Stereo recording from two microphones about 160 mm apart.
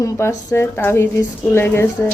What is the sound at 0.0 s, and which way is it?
Speech, 15° left (ahead or behind).